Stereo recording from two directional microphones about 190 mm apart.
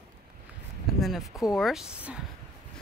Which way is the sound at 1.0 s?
Centre (ahead or behind).